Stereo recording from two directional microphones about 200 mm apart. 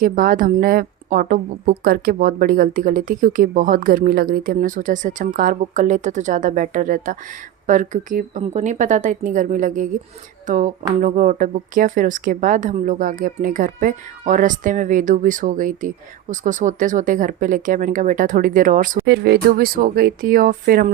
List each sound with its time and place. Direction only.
0.0 s a woman's voice: 45° right (ahead or behind)